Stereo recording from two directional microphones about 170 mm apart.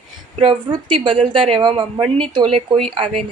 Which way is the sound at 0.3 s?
35° right (ahead or behind).